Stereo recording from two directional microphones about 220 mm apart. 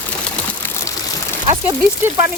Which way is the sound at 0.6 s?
10° left (ahead or behind).